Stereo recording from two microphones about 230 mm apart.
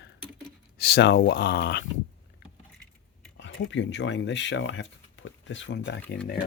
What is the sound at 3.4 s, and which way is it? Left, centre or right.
Speech, left.